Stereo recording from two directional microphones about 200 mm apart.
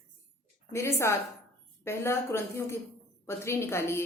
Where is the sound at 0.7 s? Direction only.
15° left (ahead or behind).